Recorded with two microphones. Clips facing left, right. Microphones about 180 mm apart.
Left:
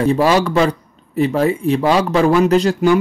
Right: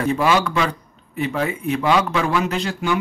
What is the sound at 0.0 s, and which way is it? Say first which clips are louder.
Speech: left 5 dB; 35° left (ahead or behind).